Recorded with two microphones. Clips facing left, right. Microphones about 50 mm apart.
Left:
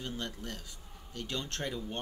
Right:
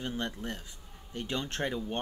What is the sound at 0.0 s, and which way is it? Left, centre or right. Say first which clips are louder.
Speech: right 4 dB; right.